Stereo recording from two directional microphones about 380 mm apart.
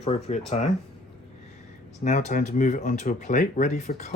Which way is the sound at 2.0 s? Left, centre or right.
Centre.